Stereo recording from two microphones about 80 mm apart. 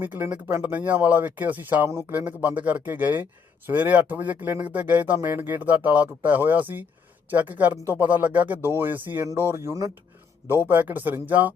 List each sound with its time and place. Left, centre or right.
0.0 s speech: right
1.9 s speech: right
2.1 s speech: right
9.2 s speech: right
10.4 s speech: right